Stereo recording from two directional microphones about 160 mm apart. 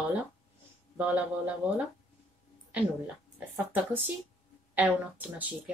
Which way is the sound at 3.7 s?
10° right (ahead or behind).